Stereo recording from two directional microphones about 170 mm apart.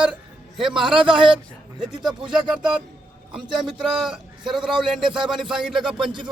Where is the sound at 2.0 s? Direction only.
25° right (ahead or behind).